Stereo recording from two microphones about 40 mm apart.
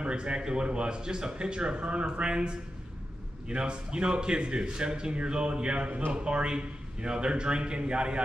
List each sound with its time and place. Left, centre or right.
0.0 s speech: right